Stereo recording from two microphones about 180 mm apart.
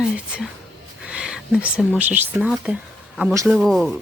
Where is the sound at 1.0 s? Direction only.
5° right (ahead or behind).